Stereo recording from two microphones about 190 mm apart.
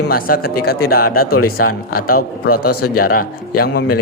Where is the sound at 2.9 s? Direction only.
50° left (ahead or behind).